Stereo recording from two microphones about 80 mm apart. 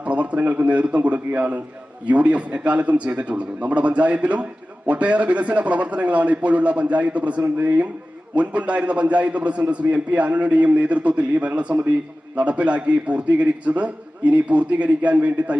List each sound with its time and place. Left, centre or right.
0.0 s a man's voice: centre